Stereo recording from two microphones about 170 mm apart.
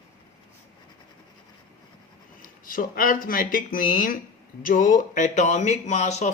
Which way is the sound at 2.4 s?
55° left (ahead or behind).